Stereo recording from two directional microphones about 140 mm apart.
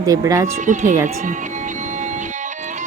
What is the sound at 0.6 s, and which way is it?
Speech, 60° right (ahead or behind).